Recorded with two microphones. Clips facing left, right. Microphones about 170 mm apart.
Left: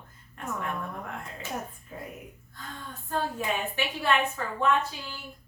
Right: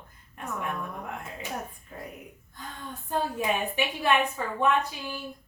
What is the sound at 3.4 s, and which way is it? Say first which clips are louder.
A woman's voice: right 2 dB; 15° right (ahead or behind).